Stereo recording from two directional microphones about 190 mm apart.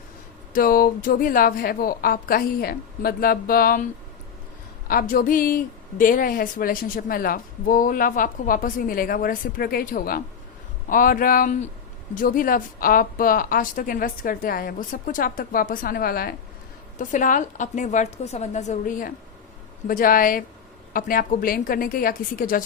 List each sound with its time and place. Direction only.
0.5 s a woman's voice: 50° left (ahead or behind)
4.9 s a woman's voice: 50° left (ahead or behind)